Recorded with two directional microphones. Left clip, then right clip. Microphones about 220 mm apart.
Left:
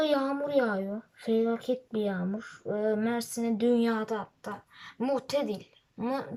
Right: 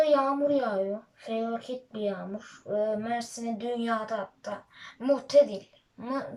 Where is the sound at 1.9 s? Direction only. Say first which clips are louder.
Left 1 dB; 40° left (ahead or behind).